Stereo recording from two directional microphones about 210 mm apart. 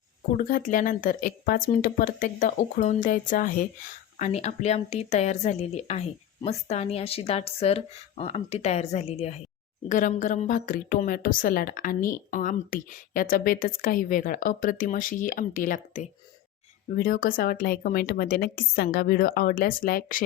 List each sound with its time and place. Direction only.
0.3 s a woman's voice: 40° left (ahead or behind)